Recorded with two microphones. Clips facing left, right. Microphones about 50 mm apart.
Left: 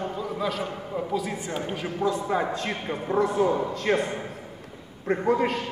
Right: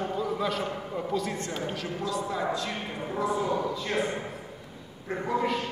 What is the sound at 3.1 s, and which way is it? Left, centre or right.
Speech, left.